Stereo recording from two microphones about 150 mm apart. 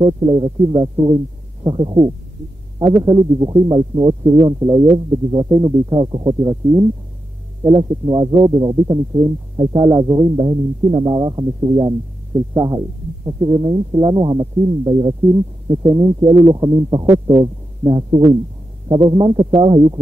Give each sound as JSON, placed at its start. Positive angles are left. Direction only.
{"t": 0.0, "sound": "speech", "side_deg": -30}